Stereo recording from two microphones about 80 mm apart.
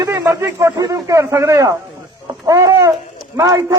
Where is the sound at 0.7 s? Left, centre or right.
Right.